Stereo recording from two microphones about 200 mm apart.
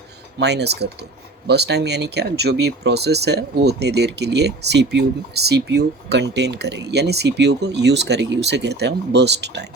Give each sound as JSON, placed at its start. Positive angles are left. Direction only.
{"t": 0.3, "sound": "speech", "side_deg": -55}